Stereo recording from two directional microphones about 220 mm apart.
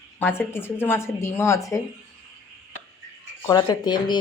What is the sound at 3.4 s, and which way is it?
Speech, 20° left (ahead or behind).